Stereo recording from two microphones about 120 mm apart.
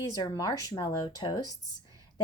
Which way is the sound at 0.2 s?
30° left (ahead or behind).